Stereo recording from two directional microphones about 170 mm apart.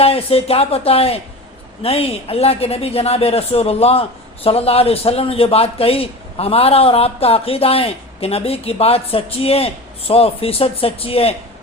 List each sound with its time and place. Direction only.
0.0 s a man's voice: 35° left (ahead or behind)